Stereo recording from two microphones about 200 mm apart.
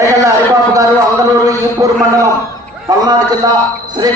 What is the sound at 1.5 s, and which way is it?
A man's voice, 15° right (ahead or behind).